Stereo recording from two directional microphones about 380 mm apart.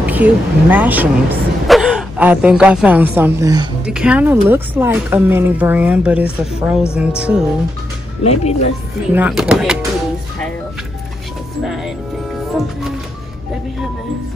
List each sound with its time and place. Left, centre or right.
0.0 s speech: centre
8.2 s speech: centre
9.1 s speech: centre
11.6 s music: centre